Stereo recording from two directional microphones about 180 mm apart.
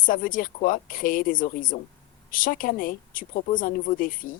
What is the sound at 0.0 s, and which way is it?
Speech, 50° left (ahead or behind).